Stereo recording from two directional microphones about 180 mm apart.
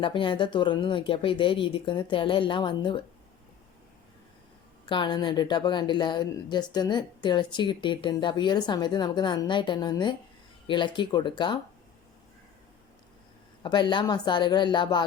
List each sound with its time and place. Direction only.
0.0 s a woman's voice: 25° left (ahead or behind)
4.9 s a woman's voice: 25° left (ahead or behind)
13.6 s a woman's voice: 25° left (ahead or behind)